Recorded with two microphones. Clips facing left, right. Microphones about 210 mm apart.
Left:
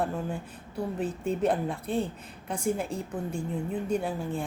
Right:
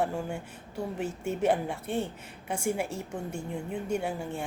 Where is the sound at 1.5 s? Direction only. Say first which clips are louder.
Even; 65° right (ahead or behind).